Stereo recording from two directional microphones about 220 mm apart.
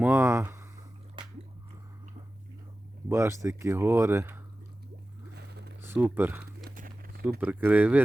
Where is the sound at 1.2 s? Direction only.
20° right (ahead or behind).